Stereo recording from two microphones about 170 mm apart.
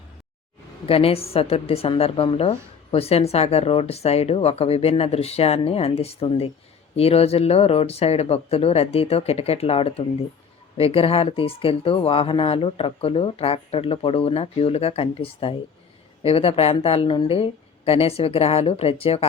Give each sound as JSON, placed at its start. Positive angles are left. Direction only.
{"t": 0.9, "sound": "a woman's voice", "side_deg": 35}